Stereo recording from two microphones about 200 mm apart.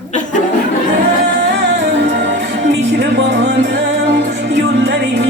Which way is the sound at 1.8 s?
65° right (ahead or behind).